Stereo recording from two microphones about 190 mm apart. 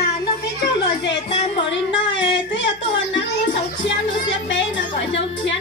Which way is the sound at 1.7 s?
70° left (ahead or behind).